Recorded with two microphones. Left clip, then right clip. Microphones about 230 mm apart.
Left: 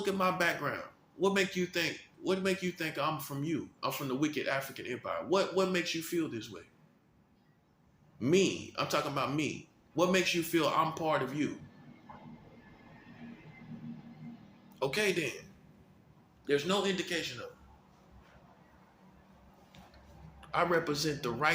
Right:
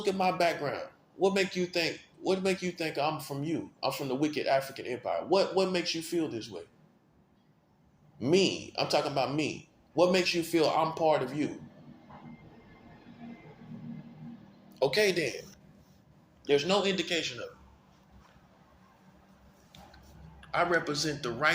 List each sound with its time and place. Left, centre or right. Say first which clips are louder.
0.0 s a man's voice: right 3 dB; centre
8.2 s a man's voice: right 2 dB; centre
14.8 s a man's voice: right 5 dB; centre
16.5 s a man's voice: right 4 dB; centre
20.5 s a man's voice: right 2 dB; centre